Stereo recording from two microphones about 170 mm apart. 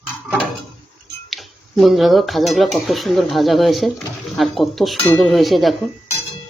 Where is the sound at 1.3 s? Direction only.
Centre (ahead or behind).